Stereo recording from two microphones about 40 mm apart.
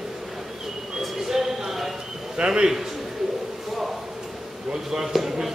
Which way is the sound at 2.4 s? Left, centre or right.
Right.